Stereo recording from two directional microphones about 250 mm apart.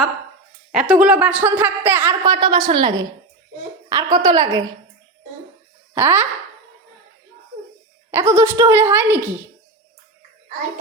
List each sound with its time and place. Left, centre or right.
0.7 s a woman's voice: centre
5.9 s speech: centre
8.1 s a woman's voice: centre